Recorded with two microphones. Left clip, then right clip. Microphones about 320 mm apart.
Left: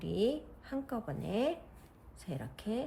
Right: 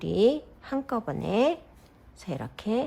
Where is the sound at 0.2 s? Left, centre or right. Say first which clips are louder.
Right 11 dB; centre.